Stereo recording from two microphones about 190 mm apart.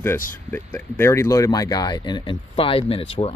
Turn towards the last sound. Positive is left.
turn(degrees=30)  # may be behind; listen again after turning